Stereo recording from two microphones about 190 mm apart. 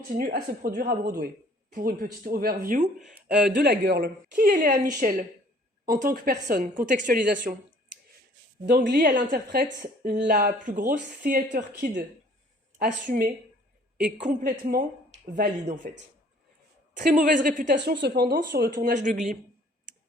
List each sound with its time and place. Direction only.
0.1 s speech: 50° right (ahead or behind)
3.6 s speech: 55° right (ahead or behind)
8.6 s a woman's voice: 60° right (ahead or behind)
9.3 s a woman's voice: 50° right (ahead or behind)
12.8 s speech: 45° right (ahead or behind)
17.0 s speech: 45° right (ahead or behind)
17.9 s a woman's voice: 65° right (ahead or behind); by 19.2 s 40° right (ahead or behind)